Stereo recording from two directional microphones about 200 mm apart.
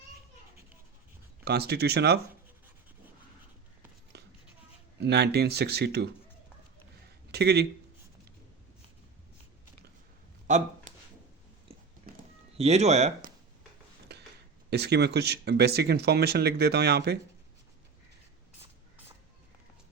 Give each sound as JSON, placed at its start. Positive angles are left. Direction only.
{"t": 1.5, "sound": "speech", "side_deg": -55}
{"t": 4.1, "sound": "a sound", "side_deg": -55}
{"t": 4.9, "sound": "speech", "side_deg": -55}
{"t": 7.3, "sound": "speech", "side_deg": -55}
{"t": 10.4, "sound": "a sound", "side_deg": -40}
{"t": 12.1, "sound": "music", "side_deg": -45}
{"t": 12.5, "sound": "speech", "side_deg": -30}
{"t": 14.7, "sound": "speech", "side_deg": -55}